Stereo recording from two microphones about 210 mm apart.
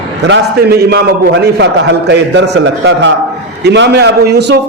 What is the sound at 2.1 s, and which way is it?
A man's voice, 55° right (ahead or behind).